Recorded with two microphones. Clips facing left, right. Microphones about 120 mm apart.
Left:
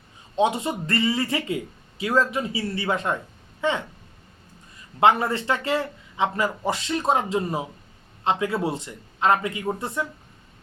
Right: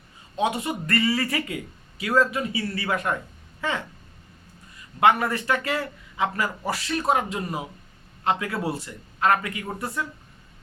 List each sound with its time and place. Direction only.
0.3 s a man's voice: 25° left (ahead or behind)
4.9 s a man's voice: 25° left (ahead or behind)